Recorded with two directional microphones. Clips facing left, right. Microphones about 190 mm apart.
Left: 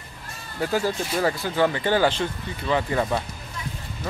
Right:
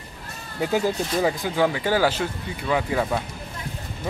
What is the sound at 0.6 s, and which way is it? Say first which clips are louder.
Speech: right 2 dB; 15° right (ahead or behind).